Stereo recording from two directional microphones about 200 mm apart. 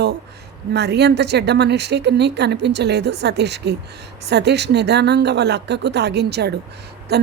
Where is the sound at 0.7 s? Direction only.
55° right (ahead or behind).